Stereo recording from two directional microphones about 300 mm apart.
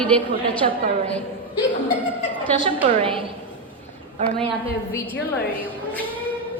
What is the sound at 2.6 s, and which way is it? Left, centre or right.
Speech, centre.